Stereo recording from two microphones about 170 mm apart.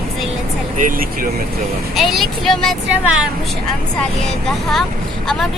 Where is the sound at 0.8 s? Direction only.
55° right (ahead or behind).